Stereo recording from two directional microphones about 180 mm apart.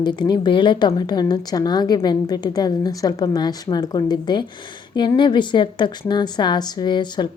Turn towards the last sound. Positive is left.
turn(degrees=25)  # may be behind; listen again after turning